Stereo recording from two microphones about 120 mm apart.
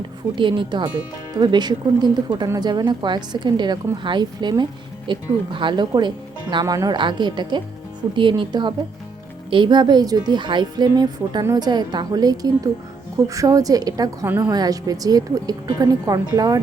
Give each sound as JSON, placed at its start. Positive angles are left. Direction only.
{"t": 0.3, "sound": "a woman's voice", "side_deg": -40}
{"t": 14.3, "sound": "a woman's voice", "side_deg": -15}
{"t": 14.5, "sound": "speech", "side_deg": -30}